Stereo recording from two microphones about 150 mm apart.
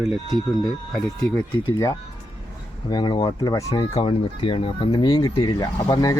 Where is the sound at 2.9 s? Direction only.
30° left (ahead or behind).